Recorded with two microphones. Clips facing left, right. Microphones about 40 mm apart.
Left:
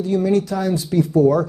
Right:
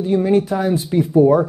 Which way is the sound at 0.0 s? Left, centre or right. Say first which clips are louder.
Right 2 dB; right.